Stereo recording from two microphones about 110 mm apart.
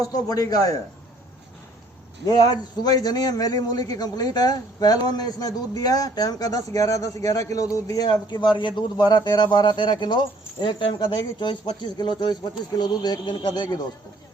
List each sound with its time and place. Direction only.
0.0 s a man's voice: 35° left (ahead or behind)
2.2 s a man's voice: 35° left (ahead or behind)